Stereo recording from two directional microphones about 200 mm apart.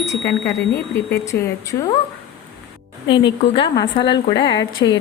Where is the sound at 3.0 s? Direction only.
25° left (ahead or behind).